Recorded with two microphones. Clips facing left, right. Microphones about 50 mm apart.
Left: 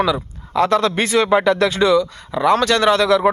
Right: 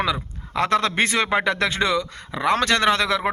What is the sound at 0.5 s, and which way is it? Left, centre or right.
Speech, right.